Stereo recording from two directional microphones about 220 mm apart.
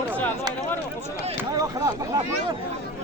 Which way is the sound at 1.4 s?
15° right (ahead or behind).